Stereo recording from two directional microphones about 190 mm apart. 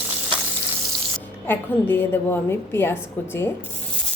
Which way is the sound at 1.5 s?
10° left (ahead or behind).